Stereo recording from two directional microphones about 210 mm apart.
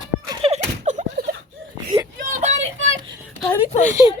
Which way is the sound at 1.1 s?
50° right (ahead or behind).